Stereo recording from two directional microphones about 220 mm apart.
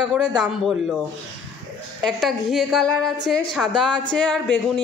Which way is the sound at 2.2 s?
Centre (ahead or behind).